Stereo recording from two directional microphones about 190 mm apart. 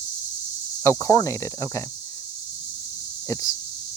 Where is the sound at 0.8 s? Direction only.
15° left (ahead or behind).